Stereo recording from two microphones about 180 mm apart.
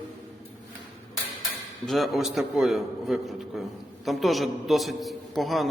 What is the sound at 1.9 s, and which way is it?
A man's voice, centre (ahead or behind).